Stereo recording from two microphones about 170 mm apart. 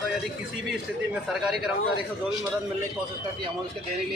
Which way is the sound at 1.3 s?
Centre (ahead or behind).